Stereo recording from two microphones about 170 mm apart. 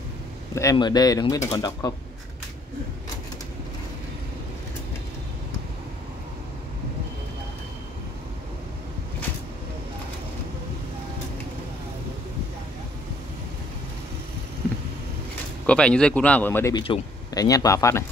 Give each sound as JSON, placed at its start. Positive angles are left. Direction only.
{"t": 0.6, "sound": "speech", "side_deg": 20}
{"t": 15.6, "sound": "speech", "side_deg": 5}
{"t": 16.7, "sound": "speech", "side_deg": 30}